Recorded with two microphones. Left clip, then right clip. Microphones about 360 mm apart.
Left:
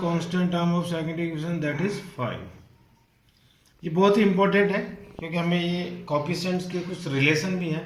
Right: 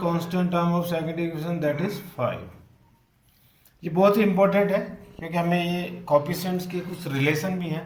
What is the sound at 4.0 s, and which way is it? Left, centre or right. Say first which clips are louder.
Speech: right 1 dB; right.